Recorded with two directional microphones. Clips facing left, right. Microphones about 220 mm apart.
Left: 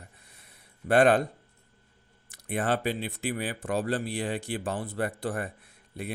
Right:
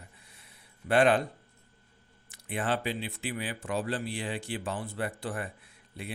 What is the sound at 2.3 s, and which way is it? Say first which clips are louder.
Speech: left 3 dB; 45° left (ahead or behind).